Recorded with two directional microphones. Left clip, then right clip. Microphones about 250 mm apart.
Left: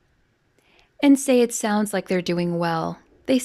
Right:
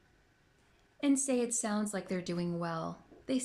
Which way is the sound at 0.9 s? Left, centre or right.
Left.